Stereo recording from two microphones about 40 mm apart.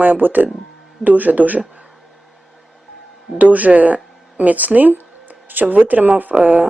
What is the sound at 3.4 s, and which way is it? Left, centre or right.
Speech, right.